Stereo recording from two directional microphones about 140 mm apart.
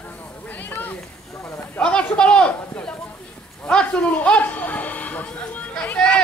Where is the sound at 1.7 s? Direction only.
10° left (ahead or behind).